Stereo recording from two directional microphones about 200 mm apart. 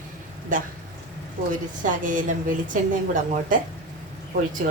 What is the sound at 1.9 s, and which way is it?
A woman's voice, 40° right (ahead or behind).